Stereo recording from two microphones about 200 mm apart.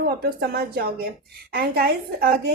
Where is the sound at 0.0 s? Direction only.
50° right (ahead or behind).